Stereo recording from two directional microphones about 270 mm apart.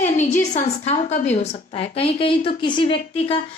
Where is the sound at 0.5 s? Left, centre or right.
Left.